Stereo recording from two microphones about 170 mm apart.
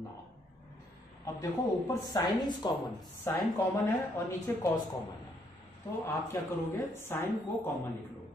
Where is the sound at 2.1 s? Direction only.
25° left (ahead or behind).